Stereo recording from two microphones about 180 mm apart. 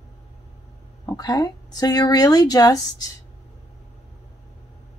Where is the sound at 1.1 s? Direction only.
20° left (ahead or behind).